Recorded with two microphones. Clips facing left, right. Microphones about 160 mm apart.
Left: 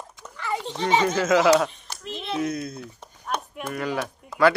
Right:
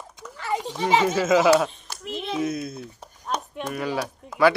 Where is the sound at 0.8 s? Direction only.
10° right (ahead or behind).